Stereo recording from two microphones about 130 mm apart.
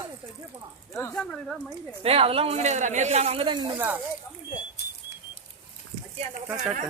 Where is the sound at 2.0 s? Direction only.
50° right (ahead or behind).